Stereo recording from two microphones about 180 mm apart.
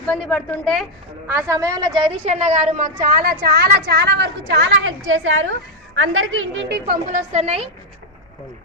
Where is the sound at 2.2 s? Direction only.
40° right (ahead or behind); by 5.3 s 90° right.